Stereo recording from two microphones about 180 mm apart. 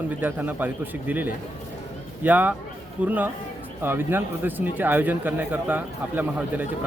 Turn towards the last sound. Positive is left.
turn(degrees=-10)  # may be behind; listen again after turning